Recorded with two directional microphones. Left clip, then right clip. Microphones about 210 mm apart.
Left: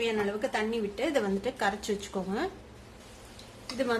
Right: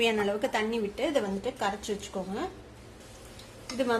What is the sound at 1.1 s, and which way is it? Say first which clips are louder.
A woman's voice: even; 15° left (ahead or behind).